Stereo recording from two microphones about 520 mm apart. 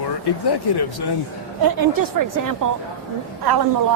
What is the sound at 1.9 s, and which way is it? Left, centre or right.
A woman's voice, right.